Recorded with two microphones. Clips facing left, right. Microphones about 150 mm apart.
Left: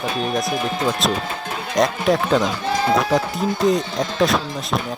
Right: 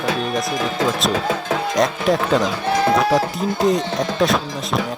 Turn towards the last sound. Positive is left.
turn(degrees=0)  # may be behind; listen again after turning